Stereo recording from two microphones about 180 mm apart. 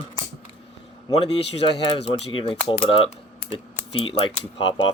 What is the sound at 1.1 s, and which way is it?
Speech, 30° left (ahead or behind).